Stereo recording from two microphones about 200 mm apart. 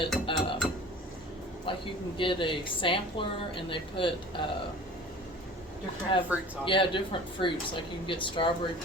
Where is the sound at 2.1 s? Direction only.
25° left (ahead or behind).